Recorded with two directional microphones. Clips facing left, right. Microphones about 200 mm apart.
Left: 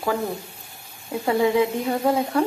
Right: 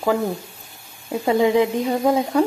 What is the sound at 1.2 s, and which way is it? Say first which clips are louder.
Speech: right 3 dB; 20° right (ahead or behind).